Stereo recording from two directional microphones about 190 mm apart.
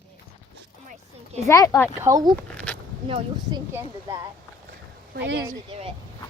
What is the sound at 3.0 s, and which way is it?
Speech, 30° right (ahead or behind).